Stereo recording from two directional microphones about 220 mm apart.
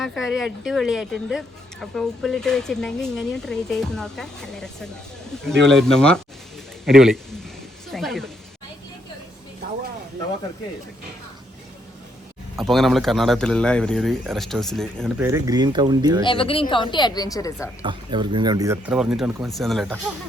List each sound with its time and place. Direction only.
0.0 s speech: centre (ahead or behind)
12.5 s speech: centre (ahead or behind)
15.2 s speech: 15° right (ahead or behind)
16.2 s a woman's voice: 25° left (ahead or behind)
17.8 s speech: 20° right (ahead or behind); by 20.0 s centre (ahead or behind)